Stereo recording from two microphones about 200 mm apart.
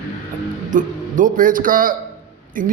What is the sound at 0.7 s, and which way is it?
A man's voice, 40° right (ahead or behind).